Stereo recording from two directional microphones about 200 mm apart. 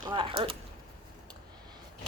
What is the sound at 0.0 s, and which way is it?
Speech, 25° right (ahead or behind).